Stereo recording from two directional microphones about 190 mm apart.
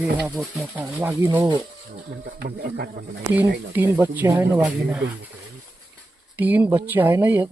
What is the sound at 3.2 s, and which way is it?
Speech, 15° right (ahead or behind).